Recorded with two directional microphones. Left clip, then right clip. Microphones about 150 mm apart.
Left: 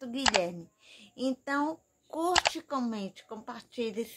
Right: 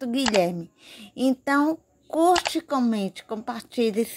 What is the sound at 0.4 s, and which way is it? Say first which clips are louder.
A child's voice: right 10 dB; 40° right (ahead or behind).